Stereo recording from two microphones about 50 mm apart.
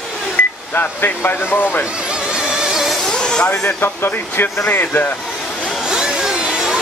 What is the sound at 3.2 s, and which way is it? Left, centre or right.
Speech, centre.